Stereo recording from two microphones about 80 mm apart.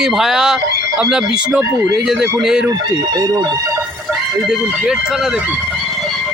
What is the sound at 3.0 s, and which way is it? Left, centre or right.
Speech, right.